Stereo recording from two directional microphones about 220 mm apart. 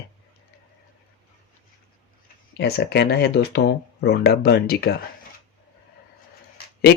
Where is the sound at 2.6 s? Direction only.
45° left (ahead or behind).